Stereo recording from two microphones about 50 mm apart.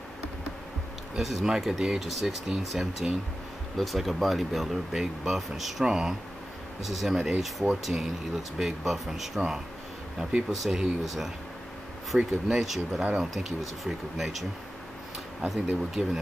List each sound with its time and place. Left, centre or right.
1.1 s speech: centre
6.8 s speech: centre
10.5 s speech: centre
12.1 s speech: centre
12.4 s speech: centre
13.3 s speech: centre
15.5 s speech: centre